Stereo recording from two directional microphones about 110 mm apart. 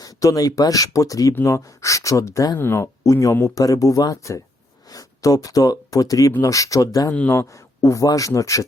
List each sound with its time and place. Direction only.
0.0 s speech: 35° left (ahead or behind)
7.1 s a man's voice: 10° left (ahead or behind)
7.3 s speech: 30° left (ahead or behind)